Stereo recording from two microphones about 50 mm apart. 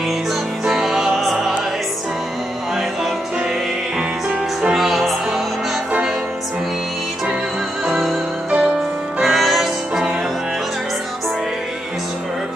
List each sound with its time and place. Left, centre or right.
0.7 s music: centre
4.7 s music: centre
7.8 s music: centre
8.5 s music: right
9.2 s music: centre